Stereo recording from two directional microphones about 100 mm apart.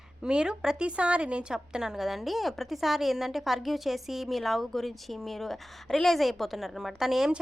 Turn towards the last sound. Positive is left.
turn(degrees=-5)  # may be behind; listen again after turning